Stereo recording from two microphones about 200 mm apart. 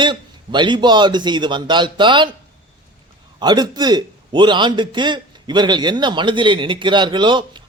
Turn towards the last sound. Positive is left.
turn(degrees=-25)  # may be behind; listen again after turning